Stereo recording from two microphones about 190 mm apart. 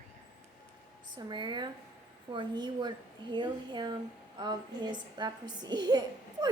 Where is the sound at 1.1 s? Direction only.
25° right (ahead or behind).